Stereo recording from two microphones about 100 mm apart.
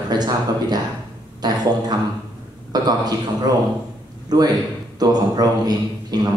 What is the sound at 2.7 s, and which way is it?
A man's voice, 40° right (ahead or behind).